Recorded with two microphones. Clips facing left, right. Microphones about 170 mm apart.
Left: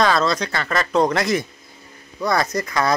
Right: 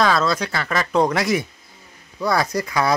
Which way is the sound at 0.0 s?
5° right (ahead or behind).